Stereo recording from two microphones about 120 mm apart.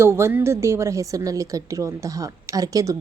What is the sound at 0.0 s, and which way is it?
A woman's voice, 20° right (ahead or behind).